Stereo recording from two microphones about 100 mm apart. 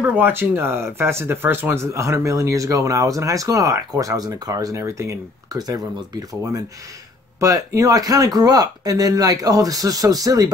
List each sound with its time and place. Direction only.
0.0 s speech: 20° right (ahead or behind); by 10.5 s 40° right (ahead or behind)